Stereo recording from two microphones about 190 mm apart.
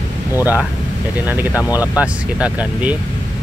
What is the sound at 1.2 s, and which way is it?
Speech, 10° right (ahead or behind).